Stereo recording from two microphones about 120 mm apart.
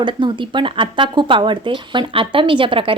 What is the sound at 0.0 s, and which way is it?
A woman's voice, 40° right (ahead or behind).